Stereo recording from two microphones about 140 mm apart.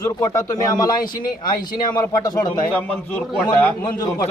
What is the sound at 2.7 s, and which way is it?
Speech, 10° left (ahead or behind).